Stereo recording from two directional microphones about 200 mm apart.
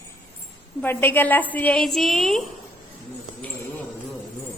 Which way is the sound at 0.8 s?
10° left (ahead or behind).